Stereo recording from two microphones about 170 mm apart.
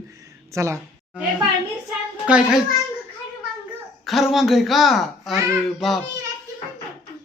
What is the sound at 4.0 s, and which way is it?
Speech, centre (ahead or behind).